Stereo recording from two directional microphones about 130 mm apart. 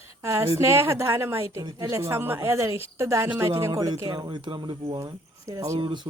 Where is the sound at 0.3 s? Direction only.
20° right (ahead or behind).